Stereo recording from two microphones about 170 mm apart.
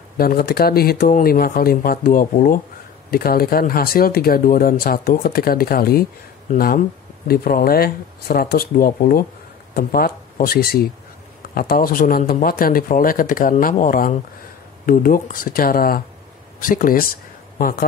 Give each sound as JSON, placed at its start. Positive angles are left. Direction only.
{"t": 0.2, "sound": "speech", "side_deg": 60}